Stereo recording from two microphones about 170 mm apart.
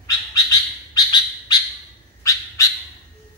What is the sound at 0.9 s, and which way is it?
Bird, 25° left (ahead or behind).